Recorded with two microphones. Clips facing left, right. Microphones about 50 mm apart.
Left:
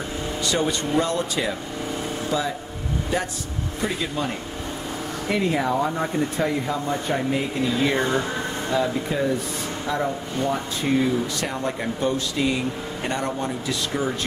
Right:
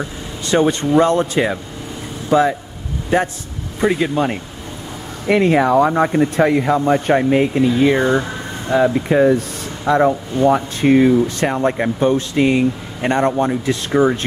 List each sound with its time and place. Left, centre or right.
0.5 s speech: right
5.3 s speech: right
7.8 s speech: right
9.1 s speech: right
9.8 s speech: right
10.8 s speech: right